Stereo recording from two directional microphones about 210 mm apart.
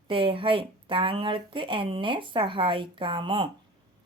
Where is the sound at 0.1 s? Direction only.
25° right (ahead or behind).